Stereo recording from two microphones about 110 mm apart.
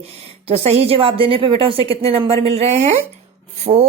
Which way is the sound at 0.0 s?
65° right (ahead or behind).